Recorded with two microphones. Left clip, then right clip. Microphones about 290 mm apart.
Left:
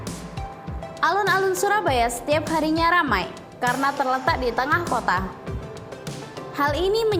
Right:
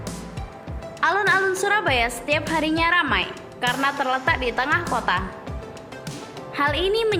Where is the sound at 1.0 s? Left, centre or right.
Centre.